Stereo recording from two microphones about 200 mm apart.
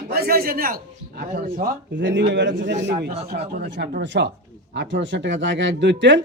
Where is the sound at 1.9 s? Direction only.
65° right (ahead or behind).